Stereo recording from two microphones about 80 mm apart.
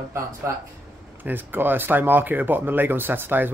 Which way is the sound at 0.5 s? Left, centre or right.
Right.